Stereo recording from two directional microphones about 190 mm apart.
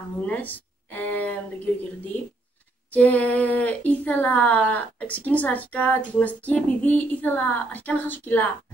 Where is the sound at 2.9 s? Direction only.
10° left (ahead or behind).